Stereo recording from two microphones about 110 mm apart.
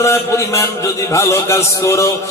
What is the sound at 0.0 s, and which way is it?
Music, 25° left (ahead or behind).